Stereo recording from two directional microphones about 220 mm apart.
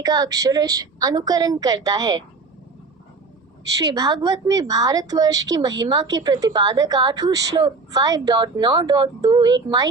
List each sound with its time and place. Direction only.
0.0 s a woman's voice: 15° right (ahead or behind)
3.8 s a woman's voice: 15° right (ahead or behind)